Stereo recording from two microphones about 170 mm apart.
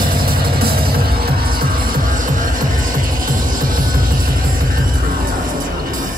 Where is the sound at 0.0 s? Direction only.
60° right (ahead or behind).